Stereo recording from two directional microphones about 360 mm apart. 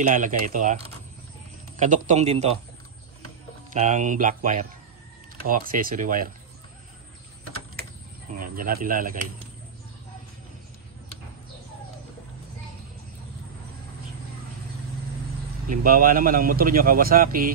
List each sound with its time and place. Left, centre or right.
0.0 s a man's voice: right
3.7 s a man's voice: right
8.4 s a man's voice: right
15.7 s a man's voice: right